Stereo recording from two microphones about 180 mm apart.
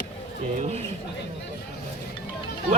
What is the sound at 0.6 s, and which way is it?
Speech, 35° right (ahead or behind).